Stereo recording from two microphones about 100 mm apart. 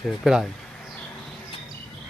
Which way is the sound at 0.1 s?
5° right (ahead or behind).